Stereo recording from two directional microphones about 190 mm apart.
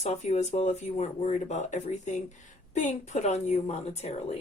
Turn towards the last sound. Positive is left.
turn(degrees=35)  # may be behind; listen again after turning